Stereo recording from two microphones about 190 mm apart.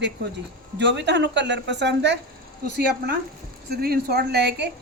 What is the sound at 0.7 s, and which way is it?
A woman's voice, 65° right (ahead or behind).